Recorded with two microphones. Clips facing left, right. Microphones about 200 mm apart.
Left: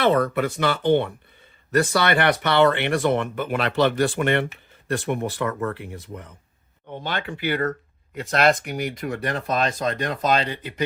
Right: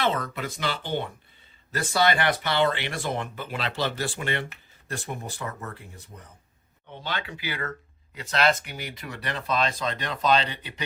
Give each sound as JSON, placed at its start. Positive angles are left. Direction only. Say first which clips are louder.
{"t": 0.1, "sound": "speech", "louder": "left 10 dB", "side_deg": 60}
{"t": 6.9, "sound": "speech", "louder": "left 5 dB", "side_deg": 50}